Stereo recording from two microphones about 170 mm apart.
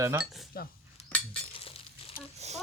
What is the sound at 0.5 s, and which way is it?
Cutlery, 65° left (ahead or behind).